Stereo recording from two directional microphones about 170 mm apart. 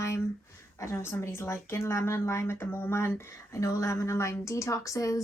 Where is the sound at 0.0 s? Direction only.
15° left (ahead or behind).